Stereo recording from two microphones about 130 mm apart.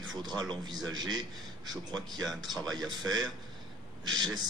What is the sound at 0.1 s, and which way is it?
A man's voice, 30° right (ahead or behind).